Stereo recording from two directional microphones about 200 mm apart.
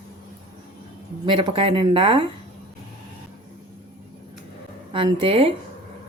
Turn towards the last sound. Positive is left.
turn(degrees=-25)  # may be behind; listen again after turning